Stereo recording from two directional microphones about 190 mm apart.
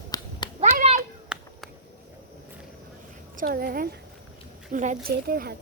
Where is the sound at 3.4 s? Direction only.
50° right (ahead or behind).